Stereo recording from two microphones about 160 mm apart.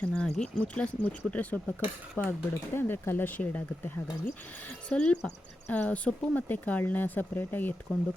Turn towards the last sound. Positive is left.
turn(degrees=10)  # may be behind; listen again after turning